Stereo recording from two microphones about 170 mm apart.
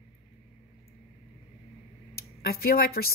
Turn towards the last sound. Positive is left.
turn(degrees=65)  # may be behind; listen again after turning